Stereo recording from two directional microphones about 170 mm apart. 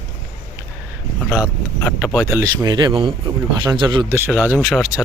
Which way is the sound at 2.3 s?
20° right (ahead or behind).